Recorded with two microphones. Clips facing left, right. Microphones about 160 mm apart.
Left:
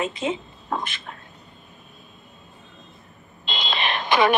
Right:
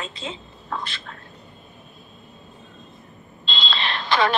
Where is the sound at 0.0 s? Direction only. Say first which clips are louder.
Left 8 dB; 20° left (ahead or behind).